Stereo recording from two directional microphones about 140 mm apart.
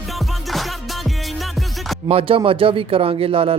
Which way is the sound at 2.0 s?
40° right (ahead or behind).